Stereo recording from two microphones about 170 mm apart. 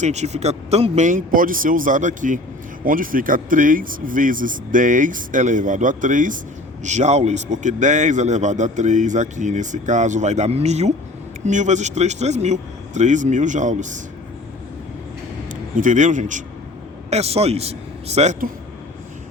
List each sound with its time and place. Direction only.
0.0 s a man's voice: 40° right (ahead or behind)
15.7 s a man's voice: 50° right (ahead or behind)